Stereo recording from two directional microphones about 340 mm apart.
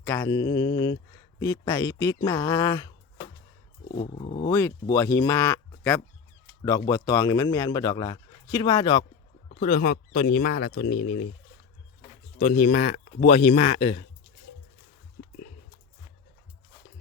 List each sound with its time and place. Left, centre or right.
0.0 s speech: centre
4.5 s speech: centre; by 10.9 s left
10.9 s speech: left
12.4 s speech: left